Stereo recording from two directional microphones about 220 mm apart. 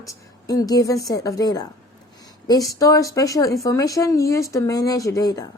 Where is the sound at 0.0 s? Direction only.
15° left (ahead or behind).